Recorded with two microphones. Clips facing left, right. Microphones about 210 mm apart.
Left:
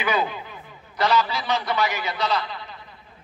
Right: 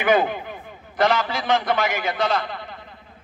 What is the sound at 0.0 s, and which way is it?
A man's voice, 50° right (ahead or behind).